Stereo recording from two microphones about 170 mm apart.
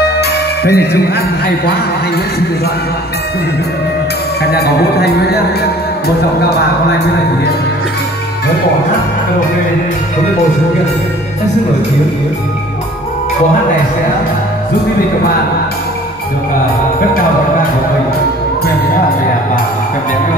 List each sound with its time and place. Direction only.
0.2 s music: 70° left (ahead or behind)
4.4 s speech: 70° left (ahead or behind)